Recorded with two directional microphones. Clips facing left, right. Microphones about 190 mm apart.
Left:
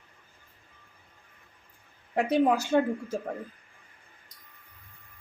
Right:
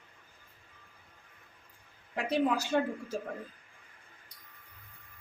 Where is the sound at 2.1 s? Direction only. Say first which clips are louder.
Left 6 dB; 50° left (ahead or behind).